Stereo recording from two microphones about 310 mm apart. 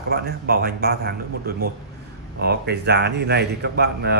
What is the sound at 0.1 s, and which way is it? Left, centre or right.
A man's voice, right.